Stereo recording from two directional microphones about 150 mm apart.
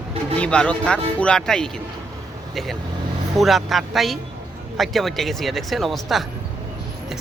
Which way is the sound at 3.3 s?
Centre (ahead or behind).